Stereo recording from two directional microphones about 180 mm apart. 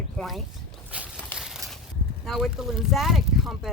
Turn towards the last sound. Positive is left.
turn(degrees=0)  # may be behind; listen again after turning